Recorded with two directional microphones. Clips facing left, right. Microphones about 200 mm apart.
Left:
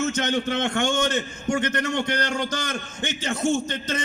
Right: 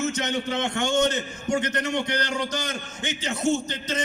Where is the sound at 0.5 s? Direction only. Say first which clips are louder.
Left 1 dB; 50° left (ahead or behind).